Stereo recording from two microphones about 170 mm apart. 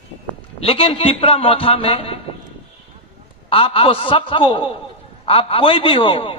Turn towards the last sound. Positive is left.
turn(degrees=30)  # may be behind; listen again after turning